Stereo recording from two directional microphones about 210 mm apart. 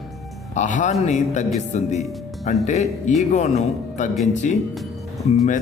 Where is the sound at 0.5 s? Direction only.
35° left (ahead or behind).